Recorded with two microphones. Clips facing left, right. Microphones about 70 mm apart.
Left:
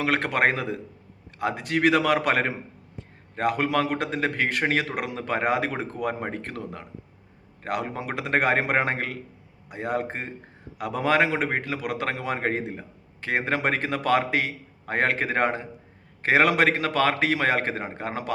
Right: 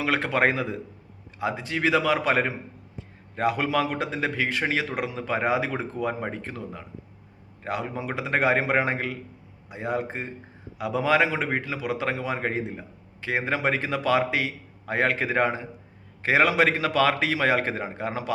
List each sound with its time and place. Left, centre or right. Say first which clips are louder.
0.0 s a man's voice: even; left
3.3 s a man's voice: even; left